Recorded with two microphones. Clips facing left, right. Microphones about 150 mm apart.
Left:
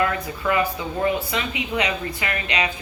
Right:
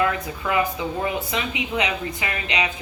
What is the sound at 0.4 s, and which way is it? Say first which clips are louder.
Speech: even; 15° right (ahead or behind).